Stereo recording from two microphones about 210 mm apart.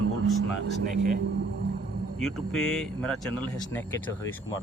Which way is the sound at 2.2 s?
Centre (ahead or behind).